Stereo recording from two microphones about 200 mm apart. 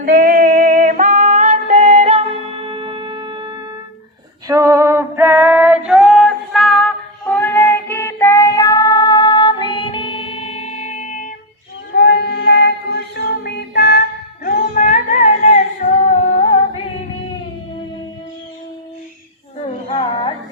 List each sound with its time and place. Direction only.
0.0 s female singing: 45° right (ahead or behind)
2.6 s wind instrument: 25° right (ahead or behind)
4.4 s female singing: 15° right (ahead or behind); by 11.3 s 40° left (ahead or behind)
11.9 s child singing: 55° left (ahead or behind)
13.1 s a sound: 55° left (ahead or behind)
14.4 s music: 40° left (ahead or behind)
19.5 s music: 25° left (ahead or behind)